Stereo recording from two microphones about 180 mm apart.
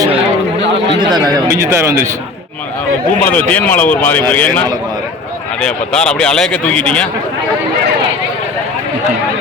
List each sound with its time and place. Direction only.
1.1 s speech: 20° right (ahead or behind)
3.2 s speech: 10° left (ahead or behind)